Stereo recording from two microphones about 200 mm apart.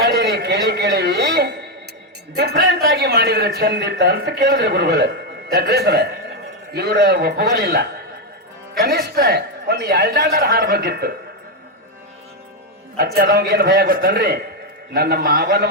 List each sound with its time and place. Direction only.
0.0 s a sound: 55° right (ahead or behind)
2.3 s a man's voice: 55° right (ahead or behind)
13.1 s a man's voice: 50° right (ahead or behind)